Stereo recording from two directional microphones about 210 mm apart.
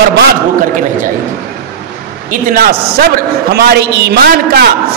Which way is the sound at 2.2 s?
45° right (ahead or behind).